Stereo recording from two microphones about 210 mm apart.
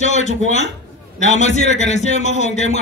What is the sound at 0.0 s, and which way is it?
A man's voice, 35° left (ahead or behind).